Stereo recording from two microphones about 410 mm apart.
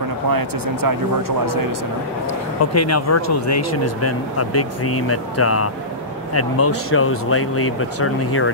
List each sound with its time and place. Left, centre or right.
0.3 s speech: right
2.6 s speech: left